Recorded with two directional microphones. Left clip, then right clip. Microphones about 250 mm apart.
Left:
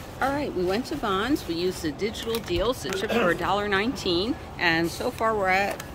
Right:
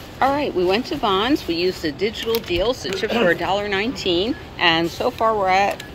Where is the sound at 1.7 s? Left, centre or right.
Left.